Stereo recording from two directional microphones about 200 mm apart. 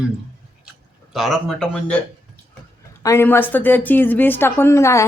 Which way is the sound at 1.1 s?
Centre (ahead or behind).